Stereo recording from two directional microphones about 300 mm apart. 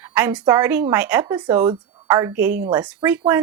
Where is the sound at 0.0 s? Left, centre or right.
Centre.